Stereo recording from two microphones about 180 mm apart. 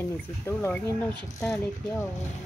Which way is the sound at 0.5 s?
15° left (ahead or behind).